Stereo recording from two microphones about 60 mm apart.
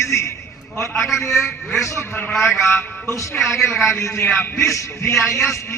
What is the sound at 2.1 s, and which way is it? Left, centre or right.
Speech, left.